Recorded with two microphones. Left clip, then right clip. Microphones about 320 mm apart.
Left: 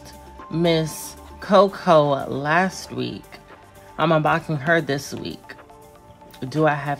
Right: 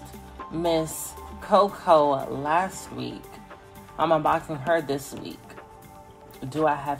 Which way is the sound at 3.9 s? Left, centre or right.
Left.